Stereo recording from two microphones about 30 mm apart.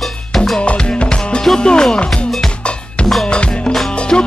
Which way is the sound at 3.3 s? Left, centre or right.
Left.